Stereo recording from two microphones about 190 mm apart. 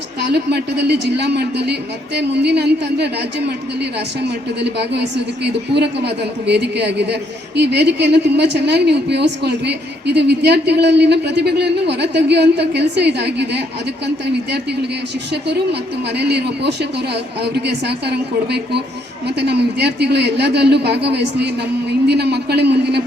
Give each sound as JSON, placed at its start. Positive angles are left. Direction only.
{"t": 0.3, "sound": "a woman's voice", "side_deg": -60}
{"t": 4.6, "sound": "a woman's voice", "side_deg": -65}
{"t": 15.3, "sound": "a woman's voice", "side_deg": -60}